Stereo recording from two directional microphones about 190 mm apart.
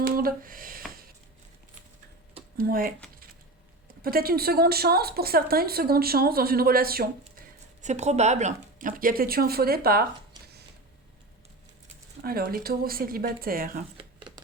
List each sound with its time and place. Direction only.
0.2 s speech: 50° right (ahead or behind)
2.6 s speech: 50° right (ahead or behind)
7.8 s speech: 35° right (ahead or behind); by 10.1 s 55° right (ahead or behind)
12.2 s speech: 50° right (ahead or behind)
13.9 s a sound: 25° right (ahead or behind)